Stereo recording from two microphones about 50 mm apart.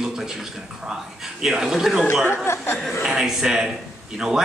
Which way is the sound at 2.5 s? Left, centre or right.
Left.